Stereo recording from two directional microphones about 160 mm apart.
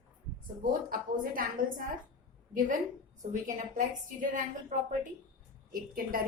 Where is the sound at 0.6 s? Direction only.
65° right (ahead or behind).